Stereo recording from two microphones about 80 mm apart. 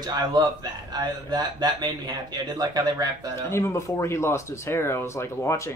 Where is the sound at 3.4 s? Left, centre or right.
Left.